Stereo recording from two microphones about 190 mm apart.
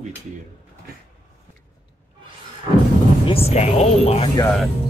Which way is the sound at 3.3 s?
30° left (ahead or behind).